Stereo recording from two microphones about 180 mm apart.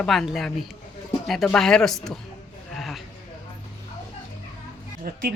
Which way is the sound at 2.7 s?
Centre (ahead or behind).